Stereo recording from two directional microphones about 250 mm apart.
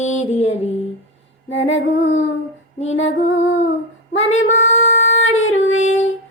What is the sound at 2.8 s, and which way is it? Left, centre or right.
Music, left.